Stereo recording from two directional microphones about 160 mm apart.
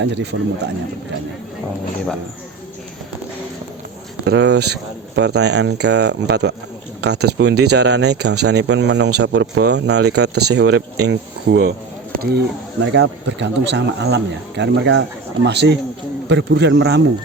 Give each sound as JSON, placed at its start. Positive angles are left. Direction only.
{"t": 0.0, "sound": "speech", "side_deg": -90}
{"t": 4.3, "sound": "speech", "side_deg": -90}
{"t": 12.1, "sound": "a sound", "side_deg": -70}
{"t": 12.9, "sound": "speech", "side_deg": -90}